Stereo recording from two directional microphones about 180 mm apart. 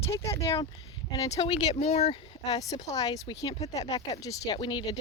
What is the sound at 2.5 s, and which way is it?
Speech, 20° left (ahead or behind).